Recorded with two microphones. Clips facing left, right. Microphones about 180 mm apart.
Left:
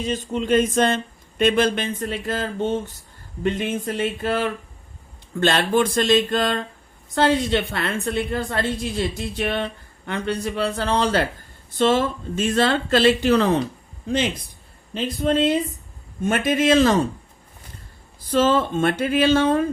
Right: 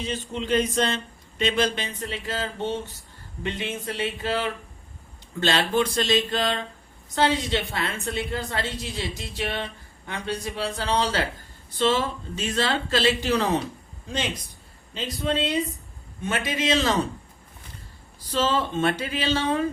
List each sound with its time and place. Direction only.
0.0 s a woman's voice: 45° left (ahead or behind)
14.9 s a woman's voice: 55° left (ahead or behind)
18.3 s a woman's voice: 50° left (ahead or behind)